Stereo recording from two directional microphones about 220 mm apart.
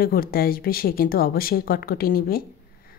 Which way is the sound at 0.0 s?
40° left (ahead or behind).